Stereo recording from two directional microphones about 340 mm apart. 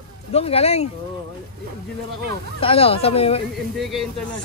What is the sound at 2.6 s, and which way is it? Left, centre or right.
Speech, centre.